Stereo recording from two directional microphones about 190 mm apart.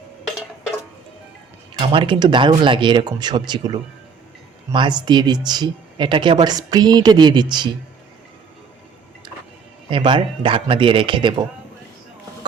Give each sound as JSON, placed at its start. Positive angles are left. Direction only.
{"t": 1.9, "sound": "speech", "side_deg": -25}
{"t": 9.9, "sound": "speech", "side_deg": -25}